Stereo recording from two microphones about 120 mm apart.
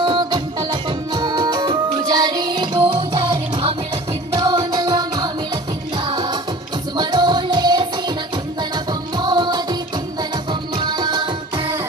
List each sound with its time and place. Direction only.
0.0 s music: 40° right (ahead or behind)
10.8 s music: 35° right (ahead or behind)